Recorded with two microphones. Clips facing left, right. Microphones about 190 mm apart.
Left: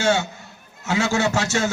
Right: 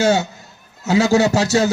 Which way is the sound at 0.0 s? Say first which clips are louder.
Right 4 dB; 40° right (ahead or behind).